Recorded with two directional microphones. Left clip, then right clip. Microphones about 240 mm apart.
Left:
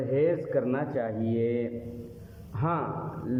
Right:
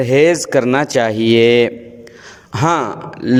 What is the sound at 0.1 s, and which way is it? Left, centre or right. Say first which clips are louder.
A man's voice: right 14 dB; right.